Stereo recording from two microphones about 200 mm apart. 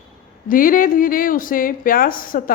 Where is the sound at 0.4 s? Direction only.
45° left (ahead or behind).